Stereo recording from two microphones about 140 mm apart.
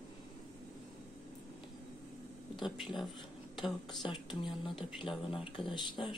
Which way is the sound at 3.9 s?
35° left (ahead or behind).